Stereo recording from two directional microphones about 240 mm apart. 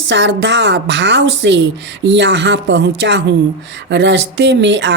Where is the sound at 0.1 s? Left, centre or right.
Right.